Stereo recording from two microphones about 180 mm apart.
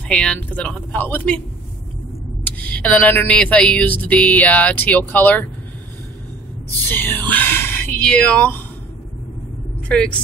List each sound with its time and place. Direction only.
0.1 s speech: 5° left (ahead or behind)
2.6 s a sound: 10° left (ahead or behind)
6.9 s speech: 10° left (ahead or behind)
9.8 s a woman's voice: 5° left (ahead or behind)